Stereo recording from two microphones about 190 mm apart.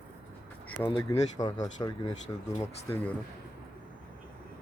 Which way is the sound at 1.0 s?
20° left (ahead or behind).